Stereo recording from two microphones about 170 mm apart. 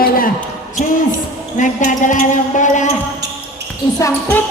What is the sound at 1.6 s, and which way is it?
A woman's voice, 50° left (ahead or behind).